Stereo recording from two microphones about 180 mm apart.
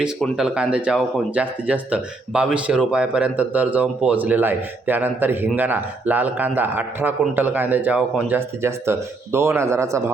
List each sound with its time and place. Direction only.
0.0 s speech: 5° right (ahead or behind)